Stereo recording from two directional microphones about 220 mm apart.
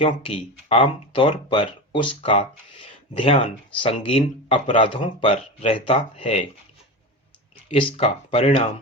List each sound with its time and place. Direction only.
0.0 s speech: 25° left (ahead or behind)
7.7 s speech: 25° left (ahead or behind)